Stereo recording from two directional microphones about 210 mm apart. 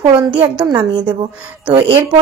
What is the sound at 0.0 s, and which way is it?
Speech, 20° right (ahead or behind).